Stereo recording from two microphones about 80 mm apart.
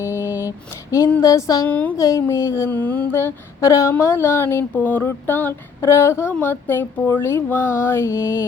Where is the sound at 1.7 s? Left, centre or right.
Centre.